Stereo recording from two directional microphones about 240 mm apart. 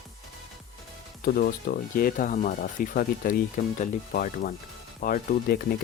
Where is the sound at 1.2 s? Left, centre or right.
Left.